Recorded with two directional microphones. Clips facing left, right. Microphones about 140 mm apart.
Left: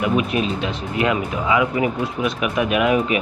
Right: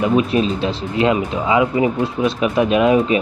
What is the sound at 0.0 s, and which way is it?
Speech, 30° right (ahead or behind).